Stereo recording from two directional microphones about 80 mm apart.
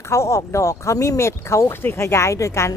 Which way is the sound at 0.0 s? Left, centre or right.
Left.